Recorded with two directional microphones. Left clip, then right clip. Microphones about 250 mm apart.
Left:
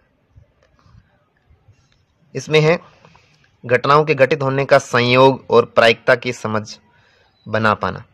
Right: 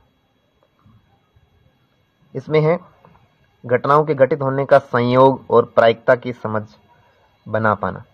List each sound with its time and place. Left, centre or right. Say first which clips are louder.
2.5 s speech: left 2 dB; left